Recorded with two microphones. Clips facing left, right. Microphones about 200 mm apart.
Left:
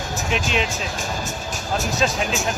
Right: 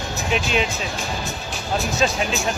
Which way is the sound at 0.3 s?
Centre (ahead or behind).